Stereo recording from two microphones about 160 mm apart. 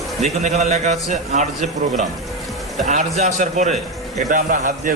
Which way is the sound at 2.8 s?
45° right (ahead or behind).